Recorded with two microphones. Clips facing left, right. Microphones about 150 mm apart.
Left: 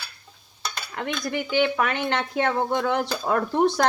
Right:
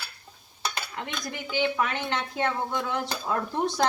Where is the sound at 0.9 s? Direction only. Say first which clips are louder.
Left 7 dB; 65° left (ahead or behind).